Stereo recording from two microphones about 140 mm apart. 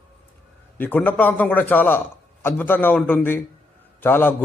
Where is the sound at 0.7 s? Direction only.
15° left (ahead or behind).